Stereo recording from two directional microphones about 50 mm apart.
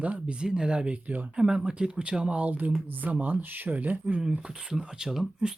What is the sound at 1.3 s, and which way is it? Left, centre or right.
Speech, centre.